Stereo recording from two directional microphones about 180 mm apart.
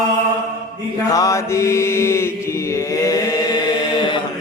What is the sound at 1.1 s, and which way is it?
Mantra, 15° left (ahead or behind).